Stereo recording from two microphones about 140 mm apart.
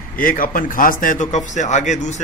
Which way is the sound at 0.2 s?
80° left.